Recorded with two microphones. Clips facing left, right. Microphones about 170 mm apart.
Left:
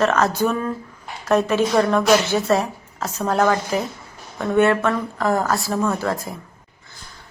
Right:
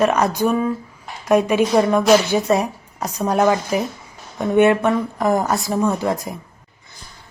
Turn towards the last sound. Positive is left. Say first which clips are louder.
# right 2 dB
turn(degrees=-15)  # may be behind; listen again after turning